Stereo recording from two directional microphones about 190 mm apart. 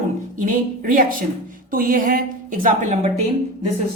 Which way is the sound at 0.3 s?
45° right (ahead or behind).